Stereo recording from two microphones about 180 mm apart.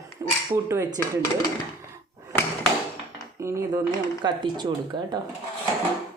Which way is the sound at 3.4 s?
15° right (ahead or behind).